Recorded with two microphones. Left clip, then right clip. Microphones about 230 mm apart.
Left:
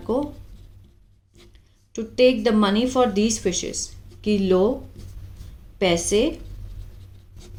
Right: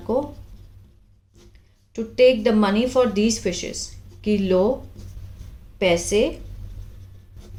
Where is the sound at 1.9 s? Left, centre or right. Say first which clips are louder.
Right 2 dB; centre.